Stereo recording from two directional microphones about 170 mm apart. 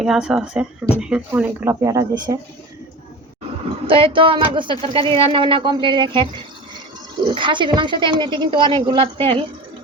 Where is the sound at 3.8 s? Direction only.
30° right (ahead or behind).